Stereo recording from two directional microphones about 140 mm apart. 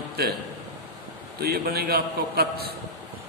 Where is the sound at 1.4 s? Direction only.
90° right.